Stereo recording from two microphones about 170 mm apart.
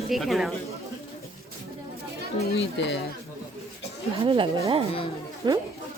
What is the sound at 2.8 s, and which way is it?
Speech, 90° left.